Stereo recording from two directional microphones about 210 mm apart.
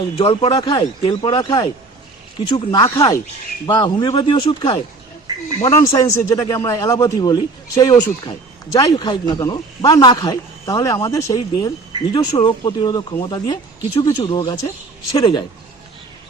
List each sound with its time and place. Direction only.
0.2 s a man's voice: 25° left (ahead or behind)